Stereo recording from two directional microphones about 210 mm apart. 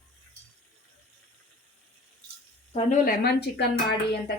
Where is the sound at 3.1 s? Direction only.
50° left (ahead or behind).